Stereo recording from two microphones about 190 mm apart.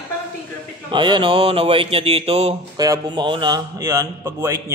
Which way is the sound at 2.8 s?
20° right (ahead or behind).